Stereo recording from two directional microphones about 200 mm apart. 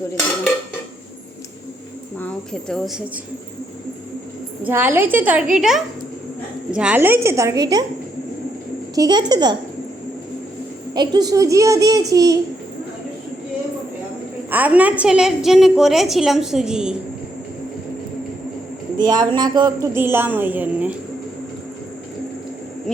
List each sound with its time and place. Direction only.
2.1 s a woman's voice: 5° left (ahead or behind)
4.6 s a woman's voice: 10° right (ahead or behind)
9.0 s a child's voice: 20° right (ahead or behind)
10.9 s a child's voice: 20° right (ahead or behind)
14.5 s a woman's voice: 10° right (ahead or behind)
18.9 s a child's voice: 20° right (ahead or behind)